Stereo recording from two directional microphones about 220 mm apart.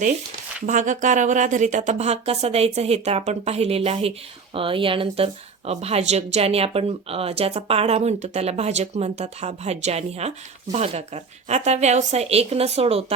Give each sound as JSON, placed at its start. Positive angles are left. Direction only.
{"t": 0.6, "sound": "speech", "side_deg": -35}